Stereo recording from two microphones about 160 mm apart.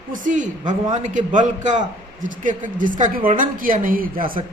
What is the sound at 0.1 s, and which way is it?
A man's voice, 50° right (ahead or behind).